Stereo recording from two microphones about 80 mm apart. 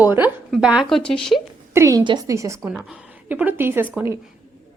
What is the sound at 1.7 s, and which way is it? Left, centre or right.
Speech, right.